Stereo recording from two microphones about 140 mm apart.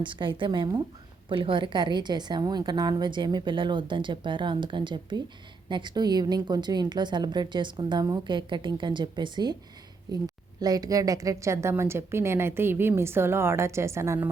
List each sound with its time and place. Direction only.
0.0 s a woman's voice: 35° right (ahead or behind); by 14.3 s 20° right (ahead or behind)